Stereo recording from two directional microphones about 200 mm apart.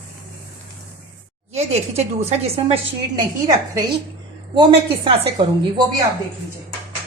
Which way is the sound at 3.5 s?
15° right (ahead or behind).